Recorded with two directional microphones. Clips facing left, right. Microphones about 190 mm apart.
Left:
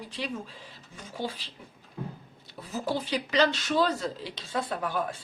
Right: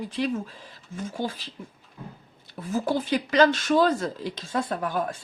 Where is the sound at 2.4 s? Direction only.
50° right (ahead or behind).